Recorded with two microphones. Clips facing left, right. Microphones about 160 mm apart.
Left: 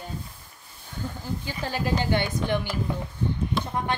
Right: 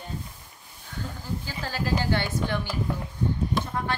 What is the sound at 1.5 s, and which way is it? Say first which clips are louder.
A woman's voice: left 2 dB; 20° left (ahead or behind).